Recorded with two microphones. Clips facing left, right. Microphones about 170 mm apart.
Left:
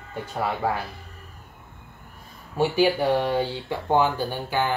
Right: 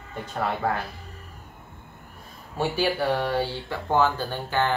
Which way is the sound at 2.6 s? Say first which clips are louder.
Left 4 dB; 15° left (ahead or behind).